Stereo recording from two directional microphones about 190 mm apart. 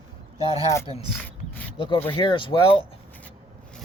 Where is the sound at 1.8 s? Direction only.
25° left (ahead or behind).